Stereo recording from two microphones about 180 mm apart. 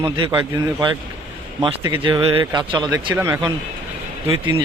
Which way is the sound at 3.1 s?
15° right (ahead or behind).